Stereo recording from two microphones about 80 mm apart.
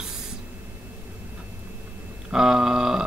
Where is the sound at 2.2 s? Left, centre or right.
Centre.